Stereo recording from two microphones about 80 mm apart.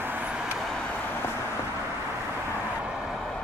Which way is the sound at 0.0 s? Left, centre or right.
Right.